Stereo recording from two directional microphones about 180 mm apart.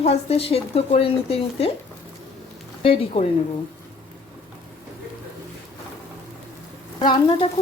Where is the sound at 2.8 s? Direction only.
35° left (ahead or behind).